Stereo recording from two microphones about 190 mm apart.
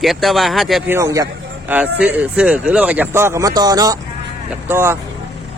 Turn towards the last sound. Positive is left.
turn(degrees=-10)  # may be behind; listen again after turning